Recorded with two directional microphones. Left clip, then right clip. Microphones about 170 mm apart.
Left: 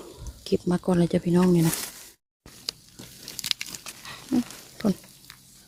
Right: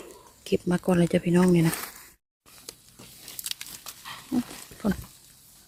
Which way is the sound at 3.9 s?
15° left (ahead or behind).